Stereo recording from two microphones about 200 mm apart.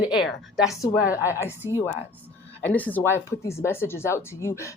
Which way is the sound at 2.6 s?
10° left (ahead or behind).